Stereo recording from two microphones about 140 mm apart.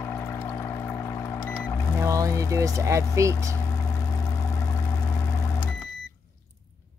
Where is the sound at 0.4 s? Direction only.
20° left (ahead or behind).